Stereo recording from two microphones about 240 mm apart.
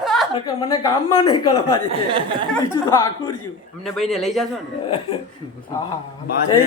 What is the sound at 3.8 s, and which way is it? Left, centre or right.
Speech, centre.